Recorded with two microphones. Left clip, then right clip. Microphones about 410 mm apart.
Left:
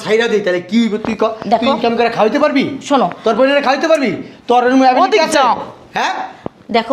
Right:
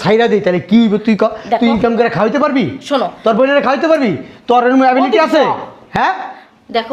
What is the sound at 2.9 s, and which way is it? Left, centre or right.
Speech, left.